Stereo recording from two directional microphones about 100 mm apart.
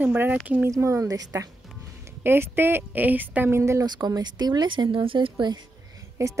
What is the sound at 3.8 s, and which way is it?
Speech, 45° right (ahead or behind).